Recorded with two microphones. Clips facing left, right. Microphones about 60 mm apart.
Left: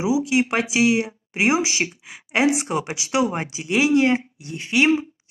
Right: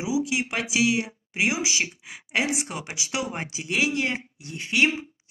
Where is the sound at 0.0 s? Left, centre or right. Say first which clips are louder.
Left 6 dB; left.